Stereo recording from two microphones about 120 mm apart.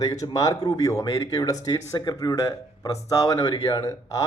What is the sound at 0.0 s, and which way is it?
Speech, 30° left (ahead or behind).